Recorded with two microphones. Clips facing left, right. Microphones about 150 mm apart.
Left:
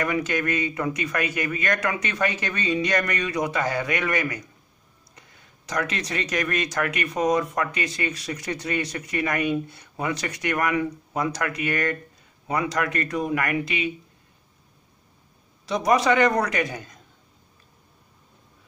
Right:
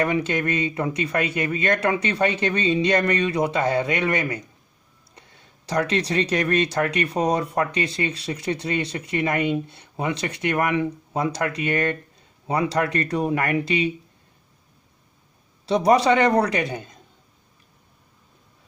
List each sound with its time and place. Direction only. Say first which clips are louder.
0.0 s speech: right 3 dB; 30° right (ahead or behind)
15.6 s speech: right 3 dB; 30° right (ahead or behind)